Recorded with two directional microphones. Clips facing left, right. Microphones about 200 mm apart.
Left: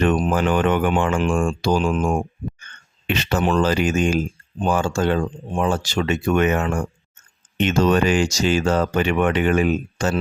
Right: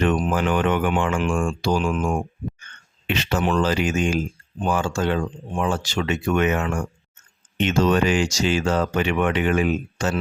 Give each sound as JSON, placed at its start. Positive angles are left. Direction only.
{"t": 0.0, "sound": "speech", "side_deg": 40}